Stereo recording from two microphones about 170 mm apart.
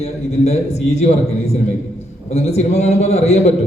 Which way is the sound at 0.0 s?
40° left (ahead or behind).